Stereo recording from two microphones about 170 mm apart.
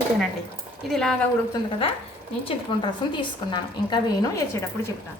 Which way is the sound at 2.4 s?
25° left (ahead or behind).